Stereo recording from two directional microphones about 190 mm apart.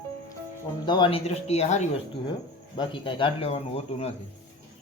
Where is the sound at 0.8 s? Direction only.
25° left (ahead or behind).